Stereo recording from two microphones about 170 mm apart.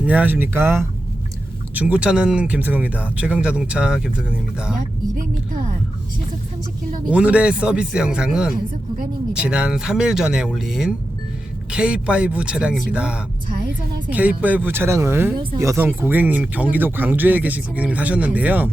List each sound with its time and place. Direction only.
0.0 s speech: 10° right (ahead or behind)
7.1 s speech: 10° right (ahead or behind)
13.5 s a woman's voice: 55° right (ahead or behind)
14.1 s speech: 10° right (ahead or behind)